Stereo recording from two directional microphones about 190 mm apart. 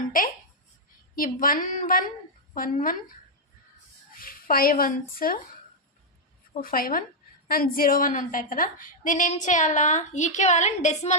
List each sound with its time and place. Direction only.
1.1 s a woman's voice: 45° left (ahead or behind)
4.2 s speech: 50° left (ahead or behind)
6.6 s a woman's voice: 50° left (ahead or behind)